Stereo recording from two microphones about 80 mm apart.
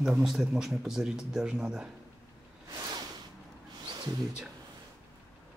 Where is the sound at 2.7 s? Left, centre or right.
Right.